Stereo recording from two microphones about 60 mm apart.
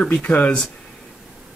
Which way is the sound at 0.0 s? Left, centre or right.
Left.